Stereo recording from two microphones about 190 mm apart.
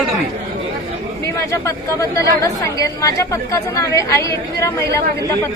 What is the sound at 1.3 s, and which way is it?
A woman's voice, 15° left (ahead or behind).